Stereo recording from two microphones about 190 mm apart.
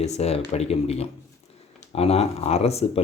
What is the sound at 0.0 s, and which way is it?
Speech, 35° left (ahead or behind).